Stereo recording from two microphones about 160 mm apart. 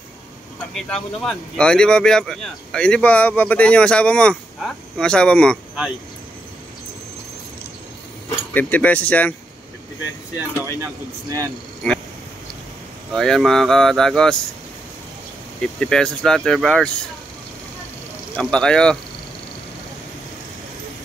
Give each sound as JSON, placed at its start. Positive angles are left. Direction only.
{"t": 0.7, "sound": "speech", "side_deg": 5}
{"t": 8.5, "sound": "speech", "side_deg": 10}
{"t": 10.6, "sound": "speech", "side_deg": -20}
{"t": 13.1, "sound": "speech", "side_deg": 0}
{"t": 15.6, "sound": "speech", "side_deg": 5}
{"t": 18.3, "sound": "speech", "side_deg": 5}